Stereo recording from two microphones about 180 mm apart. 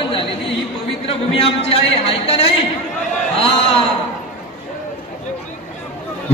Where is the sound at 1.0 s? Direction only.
30° left (ahead or behind).